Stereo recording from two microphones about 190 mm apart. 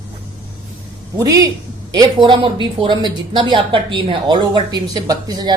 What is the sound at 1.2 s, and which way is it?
A woman's voice, 20° right (ahead or behind).